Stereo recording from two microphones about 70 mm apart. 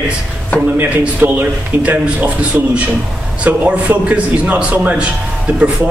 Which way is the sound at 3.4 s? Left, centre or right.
Right.